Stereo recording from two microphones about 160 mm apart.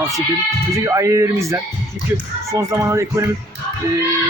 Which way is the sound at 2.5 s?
15° right (ahead or behind).